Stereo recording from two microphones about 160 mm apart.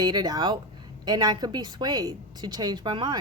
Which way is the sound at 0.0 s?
25° right (ahead or behind).